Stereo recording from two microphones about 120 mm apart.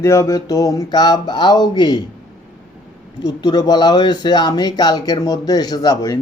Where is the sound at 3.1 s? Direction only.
35° left (ahead or behind).